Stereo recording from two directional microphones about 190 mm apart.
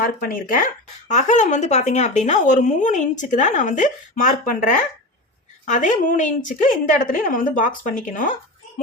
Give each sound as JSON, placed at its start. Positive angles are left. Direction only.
{"t": 0.0, "sound": "a woman's voice", "side_deg": 50}